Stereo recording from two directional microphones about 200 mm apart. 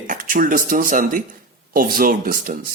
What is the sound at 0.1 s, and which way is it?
A man's voice, 40° right (ahead or behind).